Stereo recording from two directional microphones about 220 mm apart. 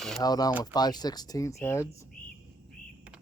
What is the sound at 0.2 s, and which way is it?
Speech, 15° left (ahead or behind).